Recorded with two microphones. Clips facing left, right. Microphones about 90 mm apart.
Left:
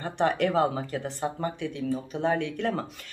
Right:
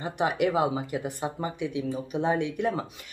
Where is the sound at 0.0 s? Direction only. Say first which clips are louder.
Left 1 dB; 10° right (ahead or behind).